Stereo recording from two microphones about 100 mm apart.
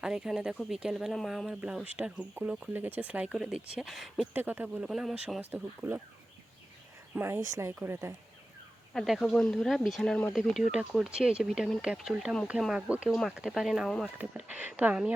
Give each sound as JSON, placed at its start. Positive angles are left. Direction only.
{"t": 0.0, "sound": "speech", "side_deg": -5}
{"t": 1.8, "sound": "speech", "side_deg": -15}
{"t": 4.4, "sound": "speech", "side_deg": -20}
{"t": 4.8, "sound": "speech", "side_deg": -5}
{"t": 5.4, "sound": "speech", "side_deg": -20}
{"t": 7.2, "sound": "speech", "side_deg": -20}
{"t": 8.9, "sound": "speech", "side_deg": 0}
{"t": 10.6, "sound": "speech", "side_deg": -10}
{"t": 14.2, "sound": "speech", "side_deg": -15}